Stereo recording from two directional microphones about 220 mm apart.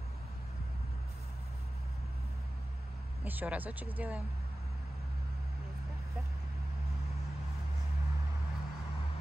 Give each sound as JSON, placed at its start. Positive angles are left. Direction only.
{"t": 3.3, "sound": "speech", "side_deg": -10}